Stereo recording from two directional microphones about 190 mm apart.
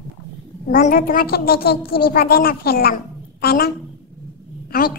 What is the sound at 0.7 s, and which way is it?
A woman's voice, 50° left (ahead or behind).